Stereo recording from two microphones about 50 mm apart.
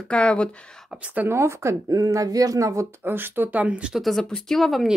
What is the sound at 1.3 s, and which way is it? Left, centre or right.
Speech, right.